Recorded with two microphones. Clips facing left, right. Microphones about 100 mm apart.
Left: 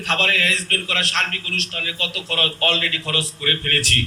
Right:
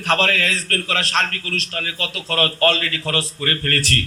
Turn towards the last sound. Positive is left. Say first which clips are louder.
# right 2 dB
turn(degrees=-40)  # may be behind; listen again after turning